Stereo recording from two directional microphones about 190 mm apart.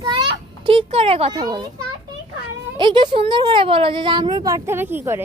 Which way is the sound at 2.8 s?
25° right (ahead or behind).